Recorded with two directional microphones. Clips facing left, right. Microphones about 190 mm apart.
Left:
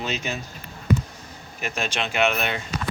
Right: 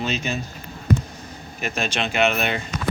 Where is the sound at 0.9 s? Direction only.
45° right (ahead or behind).